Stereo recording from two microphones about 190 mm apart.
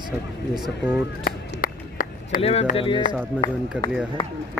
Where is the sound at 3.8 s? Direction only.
5° right (ahead or behind).